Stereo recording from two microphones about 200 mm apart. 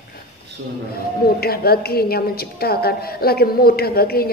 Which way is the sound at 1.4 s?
50° left (ahead or behind).